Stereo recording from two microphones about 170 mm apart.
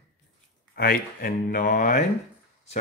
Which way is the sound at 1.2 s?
50° left (ahead or behind).